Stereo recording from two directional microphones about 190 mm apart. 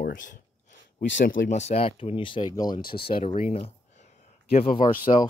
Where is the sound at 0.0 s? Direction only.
50° left (ahead or behind).